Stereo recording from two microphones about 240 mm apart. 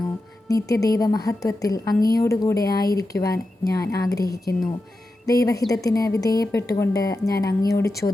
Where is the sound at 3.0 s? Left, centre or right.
Centre.